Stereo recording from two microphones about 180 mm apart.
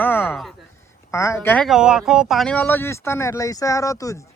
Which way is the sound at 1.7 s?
5° right (ahead or behind).